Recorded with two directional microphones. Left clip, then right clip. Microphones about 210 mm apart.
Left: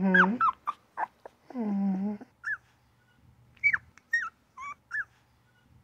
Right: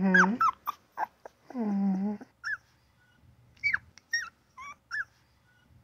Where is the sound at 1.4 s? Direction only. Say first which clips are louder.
Right 1 dB; 15° right (ahead or behind).